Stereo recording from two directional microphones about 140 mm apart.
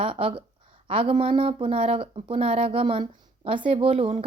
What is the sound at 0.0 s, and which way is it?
A woman's voice, 40° right (ahead or behind).